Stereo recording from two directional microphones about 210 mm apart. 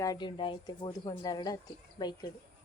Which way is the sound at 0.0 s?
20° left (ahead or behind).